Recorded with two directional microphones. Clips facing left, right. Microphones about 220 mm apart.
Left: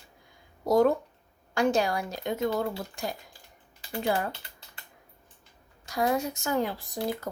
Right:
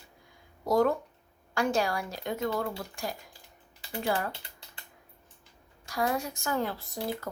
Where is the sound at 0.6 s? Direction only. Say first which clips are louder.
Left 3 dB; 20° left (ahead or behind).